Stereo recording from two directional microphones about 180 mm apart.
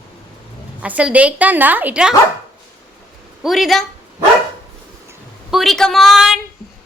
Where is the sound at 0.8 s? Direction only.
5° right (ahead or behind).